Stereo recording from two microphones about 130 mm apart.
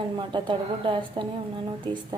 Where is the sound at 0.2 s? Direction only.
40° right (ahead or behind).